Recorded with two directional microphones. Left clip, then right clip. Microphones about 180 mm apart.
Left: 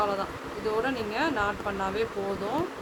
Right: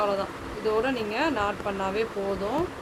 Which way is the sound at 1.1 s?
35° right (ahead or behind).